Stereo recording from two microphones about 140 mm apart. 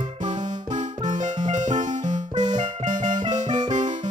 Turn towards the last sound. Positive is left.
turn(degrees=-60)  # may be behind; listen again after turning